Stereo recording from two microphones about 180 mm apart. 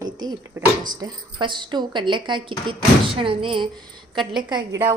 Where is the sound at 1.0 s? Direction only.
25° right (ahead or behind).